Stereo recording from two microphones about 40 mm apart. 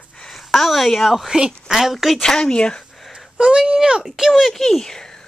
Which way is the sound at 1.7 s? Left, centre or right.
Centre.